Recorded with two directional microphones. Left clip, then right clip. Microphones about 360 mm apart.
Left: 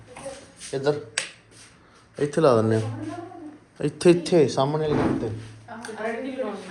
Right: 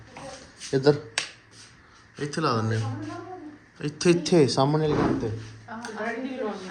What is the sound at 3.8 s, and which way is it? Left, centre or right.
Speech, centre.